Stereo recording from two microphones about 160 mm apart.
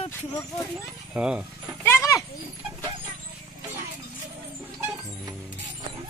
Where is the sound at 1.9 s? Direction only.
20° left (ahead or behind).